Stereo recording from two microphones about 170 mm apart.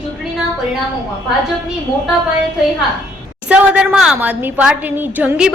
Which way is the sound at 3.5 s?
5° right (ahead or behind).